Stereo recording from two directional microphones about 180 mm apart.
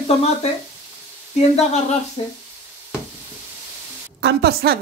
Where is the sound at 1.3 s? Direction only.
40° left (ahead or behind).